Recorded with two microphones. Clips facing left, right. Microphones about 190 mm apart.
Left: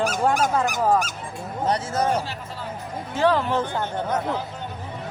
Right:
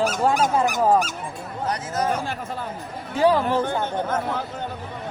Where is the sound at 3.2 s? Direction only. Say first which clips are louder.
Right 2 dB; 10° right (ahead or behind).